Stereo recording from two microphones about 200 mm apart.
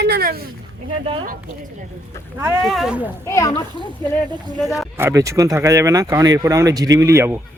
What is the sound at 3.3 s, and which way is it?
Speech, 15° left (ahead or behind).